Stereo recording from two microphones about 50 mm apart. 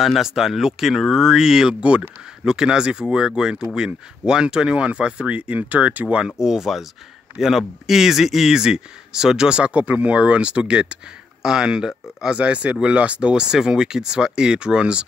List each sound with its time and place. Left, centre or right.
0.0 s speech: centre; by 6.3 s right
6.4 s speech: centre
9.8 s speech: right